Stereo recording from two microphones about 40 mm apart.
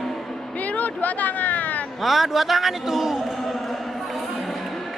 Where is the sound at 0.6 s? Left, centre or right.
Left.